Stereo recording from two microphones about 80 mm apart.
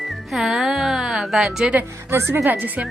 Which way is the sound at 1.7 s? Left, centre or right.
Right.